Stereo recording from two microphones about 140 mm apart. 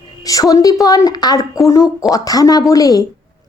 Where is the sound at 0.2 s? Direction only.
25° left (ahead or behind).